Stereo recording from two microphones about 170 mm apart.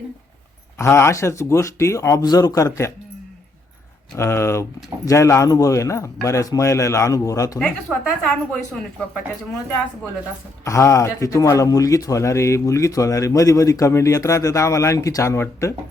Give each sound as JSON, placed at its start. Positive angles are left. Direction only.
{"t": 0.8, "sound": "speech", "side_deg": 15}
{"t": 4.1, "sound": "speech", "side_deg": 15}
{"t": 7.6, "sound": "speech", "side_deg": 5}
{"t": 10.6, "sound": "speech", "side_deg": 20}